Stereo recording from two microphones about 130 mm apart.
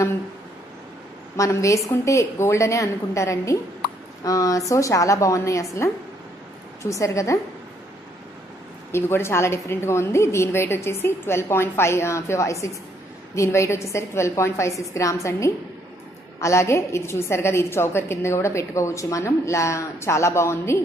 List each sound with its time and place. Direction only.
1.3 s a woman's voice: 25° left (ahead or behind)
8.9 s a woman's voice: 20° left (ahead or behind)